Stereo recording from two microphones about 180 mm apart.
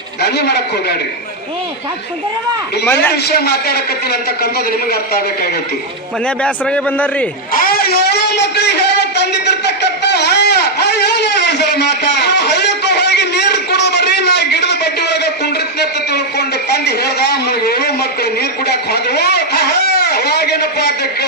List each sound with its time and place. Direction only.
0.2 s a woman's voice: 65° left (ahead or behind)
3.1 s a woman's voice: 65° left (ahead or behind)
6.2 s a man's voice: 5° left (ahead or behind)
7.5 s a sound: 55° left (ahead or behind)
16.6 s a woman's voice: 65° left (ahead or behind)